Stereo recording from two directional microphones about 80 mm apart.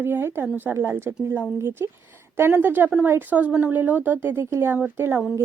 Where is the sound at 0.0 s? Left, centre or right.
Right.